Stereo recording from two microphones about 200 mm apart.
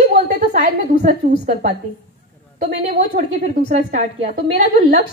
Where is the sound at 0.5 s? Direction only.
45° right (ahead or behind).